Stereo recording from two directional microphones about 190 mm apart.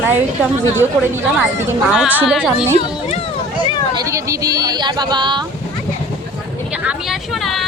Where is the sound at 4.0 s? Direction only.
15° right (ahead or behind).